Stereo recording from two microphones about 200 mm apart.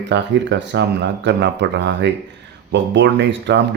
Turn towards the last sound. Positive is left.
turn(degrees=-60)  # may be behind; listen again after turning